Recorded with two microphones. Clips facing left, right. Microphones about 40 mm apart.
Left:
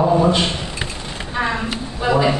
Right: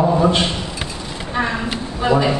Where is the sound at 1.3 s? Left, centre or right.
Centre.